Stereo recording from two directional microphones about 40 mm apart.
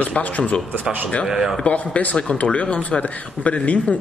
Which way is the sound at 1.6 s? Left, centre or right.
Left.